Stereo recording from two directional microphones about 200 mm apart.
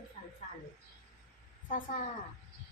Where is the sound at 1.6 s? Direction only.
40° left (ahead or behind).